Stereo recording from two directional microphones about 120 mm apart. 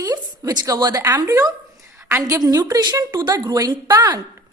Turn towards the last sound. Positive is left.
turn(degrees=-30)  # may be behind; listen again after turning